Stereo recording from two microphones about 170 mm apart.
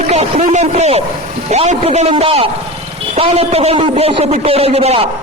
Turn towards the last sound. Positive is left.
turn(degrees=-35)  # may be behind; listen again after turning